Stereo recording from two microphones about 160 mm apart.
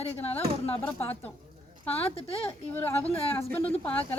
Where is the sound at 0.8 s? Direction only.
10° left (ahead or behind).